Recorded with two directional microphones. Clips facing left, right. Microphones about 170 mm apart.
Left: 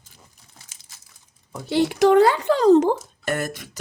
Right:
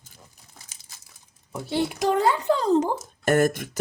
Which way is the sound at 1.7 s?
90° left.